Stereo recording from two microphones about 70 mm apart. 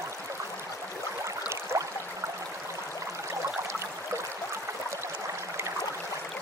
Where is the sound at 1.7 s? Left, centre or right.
Right.